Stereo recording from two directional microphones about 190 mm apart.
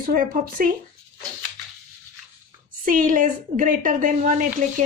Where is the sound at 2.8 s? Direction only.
45° right (ahead or behind).